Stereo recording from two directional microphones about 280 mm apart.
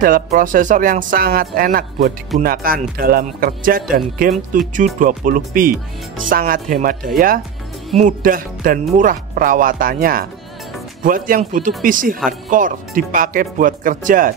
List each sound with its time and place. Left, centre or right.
0.0 s speech: right